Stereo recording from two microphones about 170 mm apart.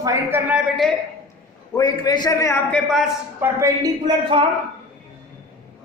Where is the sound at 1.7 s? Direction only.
25° left (ahead or behind).